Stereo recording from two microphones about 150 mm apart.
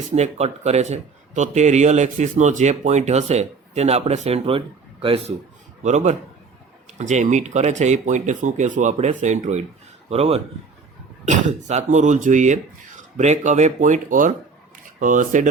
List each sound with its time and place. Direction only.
0.1 s speech: 45° right (ahead or behind)
5.8 s speech: 50° right (ahead or behind)
11.3 s speech: 55° right (ahead or behind)